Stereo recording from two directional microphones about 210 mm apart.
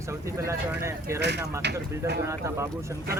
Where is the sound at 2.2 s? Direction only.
15° right (ahead or behind).